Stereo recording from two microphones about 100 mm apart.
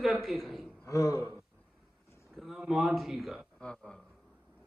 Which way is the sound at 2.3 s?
Centre (ahead or behind).